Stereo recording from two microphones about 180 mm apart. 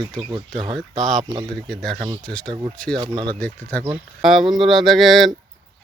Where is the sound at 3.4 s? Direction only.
10° left (ahead or behind).